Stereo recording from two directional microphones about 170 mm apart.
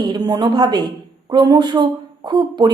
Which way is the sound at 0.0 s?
25° right (ahead or behind).